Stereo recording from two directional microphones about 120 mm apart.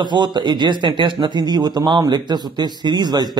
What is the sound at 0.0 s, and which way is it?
A man's voice, 40° right (ahead or behind).